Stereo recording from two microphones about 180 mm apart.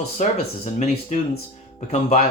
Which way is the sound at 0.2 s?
40° left (ahead or behind).